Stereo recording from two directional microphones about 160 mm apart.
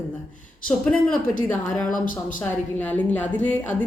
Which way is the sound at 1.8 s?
55° left (ahead or behind).